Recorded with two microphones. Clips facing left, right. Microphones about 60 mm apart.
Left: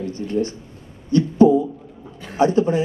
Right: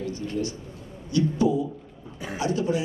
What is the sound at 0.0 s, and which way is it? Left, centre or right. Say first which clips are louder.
Speech: left 6 dB; left.